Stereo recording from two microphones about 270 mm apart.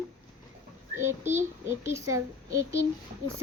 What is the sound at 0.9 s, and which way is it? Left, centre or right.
A child's voice, centre.